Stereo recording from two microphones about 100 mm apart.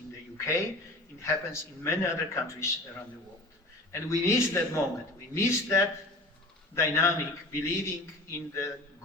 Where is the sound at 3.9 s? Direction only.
30° left (ahead or behind).